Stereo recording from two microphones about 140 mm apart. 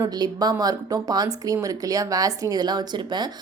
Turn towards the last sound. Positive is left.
turn(degrees=-30)  # may be behind; listen again after turning